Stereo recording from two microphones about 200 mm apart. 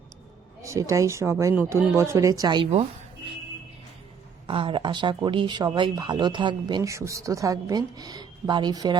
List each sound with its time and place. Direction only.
0.6 s speech: 15° right (ahead or behind)
4.4 s speech: 25° right (ahead or behind)